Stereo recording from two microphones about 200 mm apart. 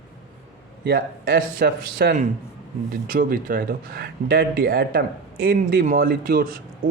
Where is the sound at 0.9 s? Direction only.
50° right (ahead or behind).